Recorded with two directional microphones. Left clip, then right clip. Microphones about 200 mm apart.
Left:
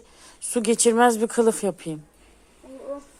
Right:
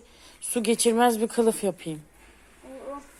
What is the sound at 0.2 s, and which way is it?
Speech, 20° left (ahead or behind).